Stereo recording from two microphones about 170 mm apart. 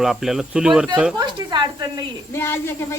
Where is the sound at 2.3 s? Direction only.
15° left (ahead or behind).